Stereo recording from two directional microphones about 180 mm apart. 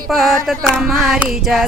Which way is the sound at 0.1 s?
Centre (ahead or behind).